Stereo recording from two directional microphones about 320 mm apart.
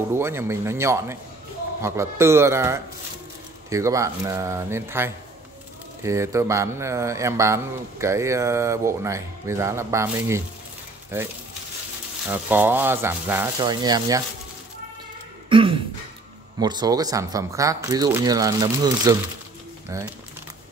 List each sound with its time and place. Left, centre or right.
0.1 s a man's voice: centre
15.5 s throat clearing: centre
16.5 s a man's voice: centre